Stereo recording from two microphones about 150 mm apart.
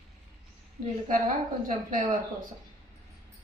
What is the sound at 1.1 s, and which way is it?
A woman's voice, 60° right (ahead or behind).